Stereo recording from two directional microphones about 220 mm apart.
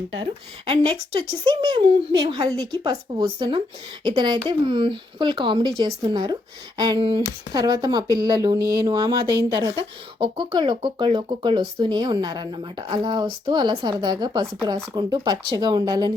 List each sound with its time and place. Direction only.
0.2 s speech: 25° right (ahead or behind)